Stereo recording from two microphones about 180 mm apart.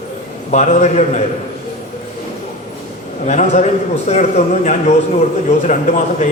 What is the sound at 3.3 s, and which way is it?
A man's voice, 40° left (ahead or behind).